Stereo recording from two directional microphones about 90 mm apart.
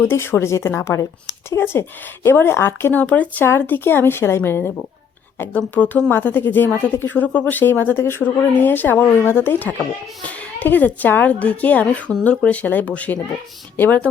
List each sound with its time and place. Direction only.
0.0 s a woman's voice: 25° left (ahead or behind)